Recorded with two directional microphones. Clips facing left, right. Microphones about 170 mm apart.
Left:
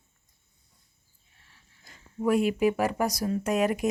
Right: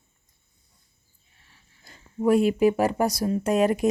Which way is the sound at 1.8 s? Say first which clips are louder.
Right 4 dB; 30° right (ahead or behind).